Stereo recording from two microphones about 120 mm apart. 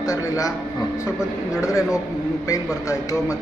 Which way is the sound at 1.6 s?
25° left (ahead or behind).